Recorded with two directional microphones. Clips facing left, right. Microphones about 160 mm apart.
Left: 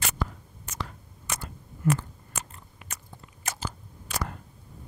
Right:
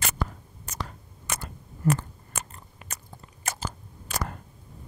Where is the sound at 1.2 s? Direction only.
50° right (ahead or behind).